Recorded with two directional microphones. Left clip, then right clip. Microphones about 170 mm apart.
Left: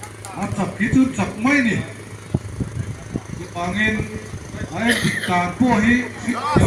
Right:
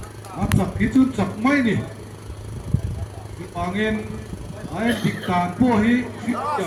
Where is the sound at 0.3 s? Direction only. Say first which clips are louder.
Even; 70° right (ahead or behind).